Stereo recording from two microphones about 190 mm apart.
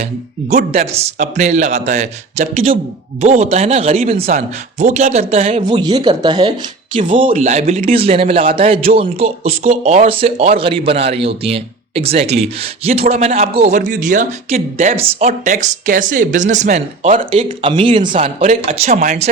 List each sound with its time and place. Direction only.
0.5 s a man's voice: 35° right (ahead or behind)
7.9 s a man's voice: 30° right (ahead or behind)